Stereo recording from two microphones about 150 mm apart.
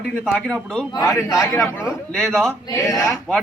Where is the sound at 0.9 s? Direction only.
25° left (ahead or behind).